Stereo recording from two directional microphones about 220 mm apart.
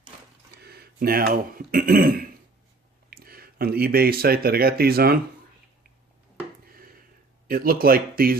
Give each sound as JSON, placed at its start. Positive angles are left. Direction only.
{"t": 0.6, "sound": "speech", "side_deg": -45}
{"t": 6.7, "sound": "a sound", "side_deg": -40}
{"t": 7.4, "sound": "speech", "side_deg": -40}